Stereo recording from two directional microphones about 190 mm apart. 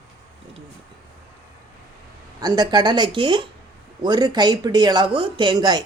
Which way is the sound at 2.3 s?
20° right (ahead or behind).